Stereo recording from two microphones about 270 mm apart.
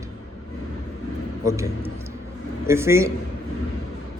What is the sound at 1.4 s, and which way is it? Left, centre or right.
A man's voice, centre.